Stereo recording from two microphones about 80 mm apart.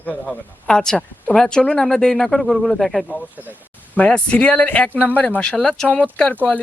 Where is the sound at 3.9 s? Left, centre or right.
Centre.